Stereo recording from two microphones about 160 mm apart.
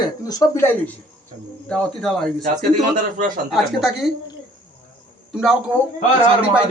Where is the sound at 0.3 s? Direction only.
20° left (ahead or behind).